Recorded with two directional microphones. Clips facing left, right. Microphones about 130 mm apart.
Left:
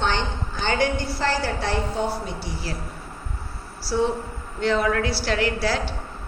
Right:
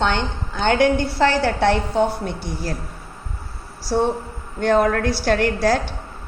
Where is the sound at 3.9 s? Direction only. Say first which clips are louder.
Right 3 dB; 55° right (ahead or behind).